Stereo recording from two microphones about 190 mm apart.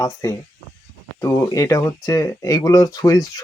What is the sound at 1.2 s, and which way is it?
Speech, 15° left (ahead or behind).